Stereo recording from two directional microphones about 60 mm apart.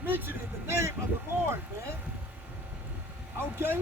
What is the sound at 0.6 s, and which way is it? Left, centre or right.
Speech, right.